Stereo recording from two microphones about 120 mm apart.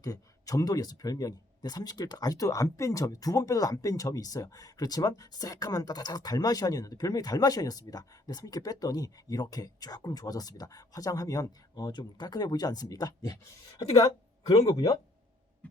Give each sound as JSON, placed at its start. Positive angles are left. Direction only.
{"t": 0.0, "sound": "speech", "side_deg": 30}
{"t": 15.6, "sound": "heart sounds", "side_deg": 10}